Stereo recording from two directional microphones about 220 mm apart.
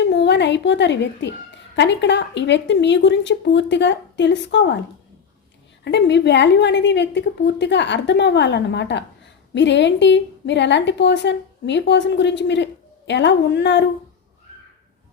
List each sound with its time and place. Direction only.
0.1 s a woman's voice: 50° left (ahead or behind)
5.8 s a woman's voice: 50° left (ahead or behind)